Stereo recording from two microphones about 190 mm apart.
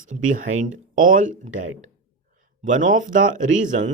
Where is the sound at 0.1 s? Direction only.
40° right (ahead or behind).